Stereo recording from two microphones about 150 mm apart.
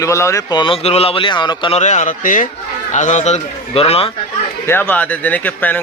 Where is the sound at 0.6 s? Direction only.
40° left (ahead or behind).